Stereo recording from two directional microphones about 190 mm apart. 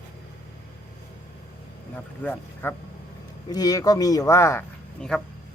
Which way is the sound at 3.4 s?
20° left (ahead or behind).